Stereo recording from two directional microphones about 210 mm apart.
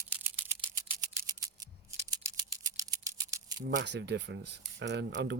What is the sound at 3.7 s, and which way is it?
Speech, 55° right (ahead or behind).